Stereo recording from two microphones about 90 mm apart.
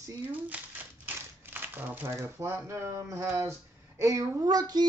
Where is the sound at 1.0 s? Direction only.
20° right (ahead or behind).